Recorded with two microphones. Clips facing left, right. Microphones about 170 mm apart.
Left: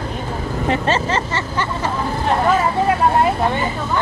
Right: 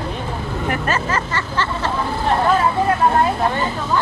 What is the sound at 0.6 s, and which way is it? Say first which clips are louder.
Speech: left 3 dB; 25° left (ahead or behind).